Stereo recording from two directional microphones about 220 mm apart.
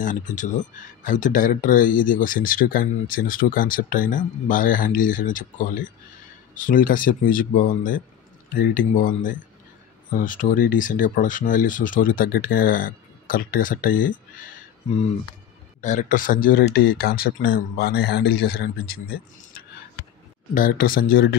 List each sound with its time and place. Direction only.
0.0 s speech: 35° left (ahead or behind)
15.8 s speech: 35° left (ahead or behind)
20.5 s speech: 40° left (ahead or behind)